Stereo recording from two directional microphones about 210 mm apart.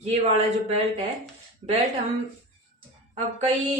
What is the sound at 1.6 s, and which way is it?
Speech, 25° right (ahead or behind).